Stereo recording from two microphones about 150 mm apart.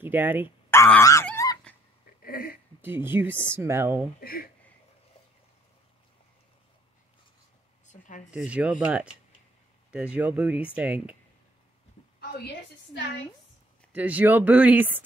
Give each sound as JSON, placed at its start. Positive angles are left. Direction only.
{"t": 0.0, "sound": "speech", "side_deg": -10}
{"t": 0.7, "sound": "honk", "side_deg": 15}
{"t": 1.4, "sound": "a sound", "side_deg": 20}
{"t": 2.2, "sound": "a sound", "side_deg": 75}
{"t": 2.8, "sound": "speech", "side_deg": -15}
{"t": 4.2, "sound": "speech", "side_deg": 80}
{"t": 7.8, "sound": "a sound", "side_deg": 55}
{"t": 8.3, "sound": "speech", "side_deg": -10}
{"t": 13.9, "sound": "speech", "side_deg": -10}